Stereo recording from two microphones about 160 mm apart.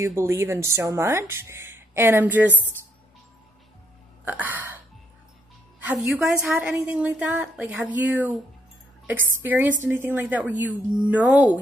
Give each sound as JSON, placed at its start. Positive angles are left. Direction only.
{"t": 0.0, "sound": "speech", "side_deg": -15}
{"t": 4.2, "sound": "a sound", "side_deg": -10}
{"t": 5.9, "sound": "a woman's voice", "side_deg": 0}